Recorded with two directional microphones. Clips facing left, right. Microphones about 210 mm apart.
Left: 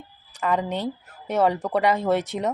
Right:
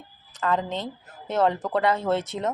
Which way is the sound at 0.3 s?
15° left (ahead or behind).